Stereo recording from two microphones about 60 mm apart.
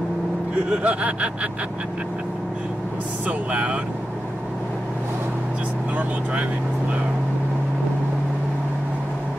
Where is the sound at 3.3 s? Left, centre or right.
Right.